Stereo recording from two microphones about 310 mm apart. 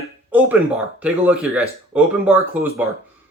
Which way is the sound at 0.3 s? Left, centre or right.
Centre.